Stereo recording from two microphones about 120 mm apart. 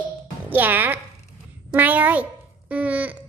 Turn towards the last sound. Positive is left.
turn(degrees=-10)  # may be behind; listen again after turning